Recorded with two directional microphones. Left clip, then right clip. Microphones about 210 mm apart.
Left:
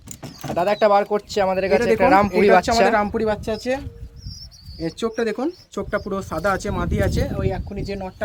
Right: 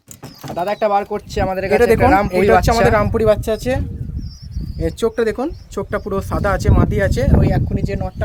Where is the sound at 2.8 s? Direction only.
35° right (ahead or behind).